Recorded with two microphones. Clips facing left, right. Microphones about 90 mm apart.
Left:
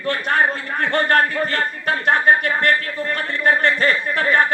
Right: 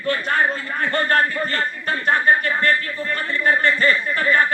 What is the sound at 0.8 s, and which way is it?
Speech, 60° left (ahead or behind).